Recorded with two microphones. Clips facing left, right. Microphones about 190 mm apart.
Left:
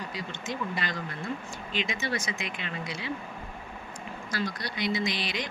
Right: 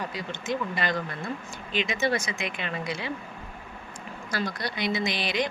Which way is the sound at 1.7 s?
60° right (ahead or behind).